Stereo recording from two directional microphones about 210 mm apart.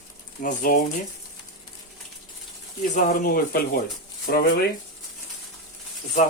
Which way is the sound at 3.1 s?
45° left (ahead or behind).